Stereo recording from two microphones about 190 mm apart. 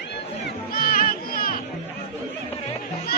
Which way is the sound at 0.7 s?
50° left (ahead or behind).